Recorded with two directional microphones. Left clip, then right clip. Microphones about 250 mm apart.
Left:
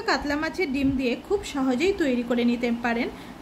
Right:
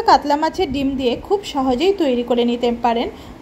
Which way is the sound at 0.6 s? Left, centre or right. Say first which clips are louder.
Right 5 dB; centre.